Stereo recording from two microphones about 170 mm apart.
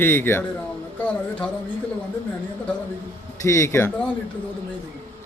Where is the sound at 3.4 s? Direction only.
15° left (ahead or behind).